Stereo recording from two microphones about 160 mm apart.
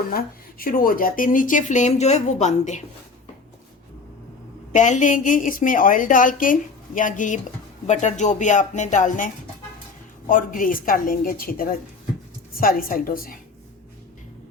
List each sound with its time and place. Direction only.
0.1 s a woman's voice: 65° left (ahead or behind); by 2.8 s 50° left (ahead or behind)
4.7 s a woman's voice: 50° left (ahead or behind)